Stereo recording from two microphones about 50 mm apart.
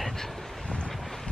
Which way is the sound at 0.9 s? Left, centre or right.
Centre.